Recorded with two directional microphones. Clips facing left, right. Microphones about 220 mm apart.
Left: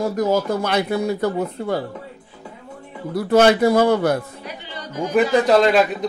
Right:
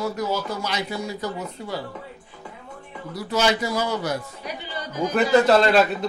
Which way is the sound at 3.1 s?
55° left (ahead or behind).